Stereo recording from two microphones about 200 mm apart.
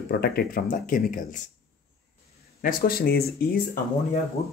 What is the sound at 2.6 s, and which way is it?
Speech, 45° left (ahead or behind).